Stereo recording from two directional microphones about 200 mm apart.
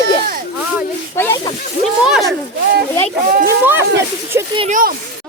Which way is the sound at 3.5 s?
10° right (ahead or behind).